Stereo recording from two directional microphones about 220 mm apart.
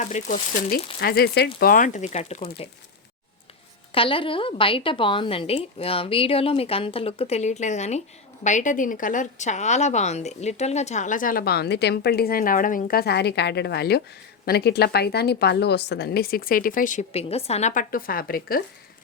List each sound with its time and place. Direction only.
0.0 s a woman's voice: 30° left (ahead or behind)
1.0 s a woman's voice: 45° left (ahead or behind); by 2.6 s 30° left (ahead or behind)
3.9 s a woman's voice: 25° left (ahead or behind); by 18.6 s 40° left (ahead or behind)